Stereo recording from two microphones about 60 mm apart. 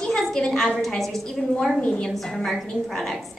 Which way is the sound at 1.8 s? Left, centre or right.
Centre.